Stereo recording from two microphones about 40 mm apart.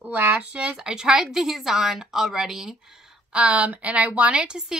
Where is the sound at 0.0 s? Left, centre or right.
Right.